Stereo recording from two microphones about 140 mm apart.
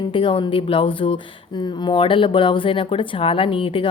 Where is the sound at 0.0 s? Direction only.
40° left (ahead or behind).